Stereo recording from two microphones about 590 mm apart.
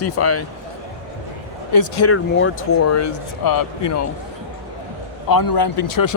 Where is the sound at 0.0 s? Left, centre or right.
Left.